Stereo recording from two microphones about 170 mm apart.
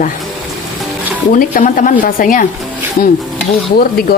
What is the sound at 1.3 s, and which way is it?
A woman's voice, 55° left (ahead or behind).